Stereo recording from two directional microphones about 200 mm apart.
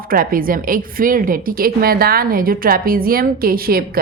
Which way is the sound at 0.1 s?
45° right (ahead or behind).